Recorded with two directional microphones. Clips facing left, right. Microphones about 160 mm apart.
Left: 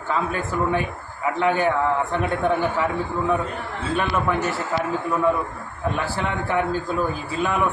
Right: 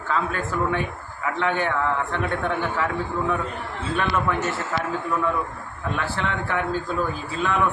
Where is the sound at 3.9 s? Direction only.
5° left (ahead or behind).